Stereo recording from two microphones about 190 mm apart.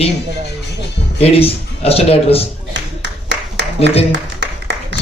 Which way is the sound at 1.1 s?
30° left (ahead or behind).